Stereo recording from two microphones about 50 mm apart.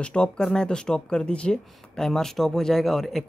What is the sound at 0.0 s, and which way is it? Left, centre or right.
Speech, centre.